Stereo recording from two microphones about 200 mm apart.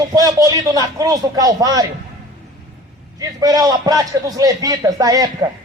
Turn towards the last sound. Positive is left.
turn(degrees=-20)  # may be behind; listen again after turning